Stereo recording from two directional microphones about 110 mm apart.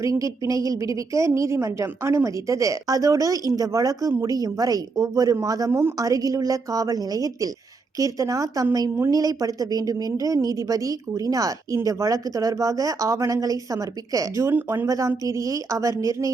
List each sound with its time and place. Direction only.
0.0 s a woman's voice: 30° right (ahead or behind)
14.5 s speech: 20° right (ahead or behind)
14.8 s a woman's voice: 30° right (ahead or behind)